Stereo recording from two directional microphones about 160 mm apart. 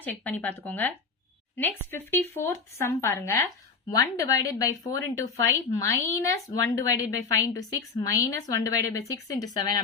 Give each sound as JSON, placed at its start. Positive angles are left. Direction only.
{"t": 0.0, "sound": "a woman's voice", "side_deg": 10}